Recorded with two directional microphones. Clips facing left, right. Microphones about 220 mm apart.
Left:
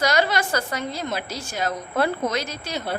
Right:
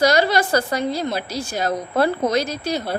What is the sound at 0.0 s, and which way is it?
A woman's voice, 35° right (ahead or behind).